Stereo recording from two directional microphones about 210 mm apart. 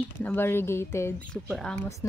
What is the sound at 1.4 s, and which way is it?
Speech, centre (ahead or behind).